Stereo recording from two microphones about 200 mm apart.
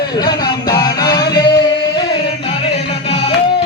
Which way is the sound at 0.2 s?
20° left (ahead or behind).